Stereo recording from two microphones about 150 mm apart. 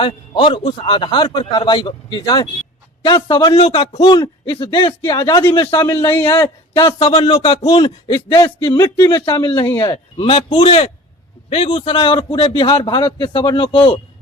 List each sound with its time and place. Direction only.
0.0 s a man's voice: 30° left (ahead or behind)
6.1 s a man's voice: 15° left (ahead or behind)
6.4 s a man's voice: 30° left (ahead or behind)